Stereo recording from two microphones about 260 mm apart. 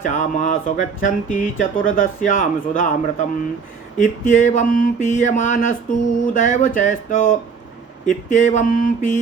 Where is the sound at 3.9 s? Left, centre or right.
Left.